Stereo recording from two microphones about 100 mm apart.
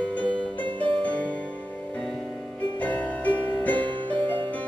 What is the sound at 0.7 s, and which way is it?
Music, 55° right (ahead or behind).